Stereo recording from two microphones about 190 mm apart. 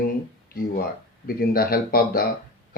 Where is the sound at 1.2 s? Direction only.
50° left (ahead or behind).